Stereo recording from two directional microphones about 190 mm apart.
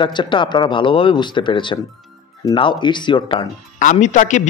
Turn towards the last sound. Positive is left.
turn(degrees=40)  # may be behind; listen again after turning